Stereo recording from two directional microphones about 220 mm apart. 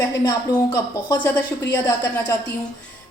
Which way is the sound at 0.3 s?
15° left (ahead or behind).